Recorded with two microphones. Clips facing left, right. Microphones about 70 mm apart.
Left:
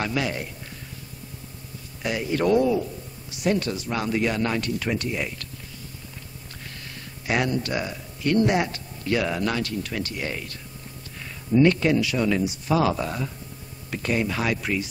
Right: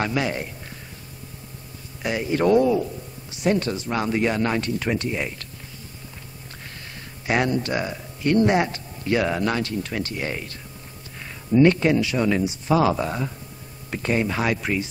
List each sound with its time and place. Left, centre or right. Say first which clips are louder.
0.0 s speech: right 2 dB; right
2.0 s speech: right 2 dB; right
7.2 s speech: right 2 dB; right
11.5 s speech: right 2 dB; right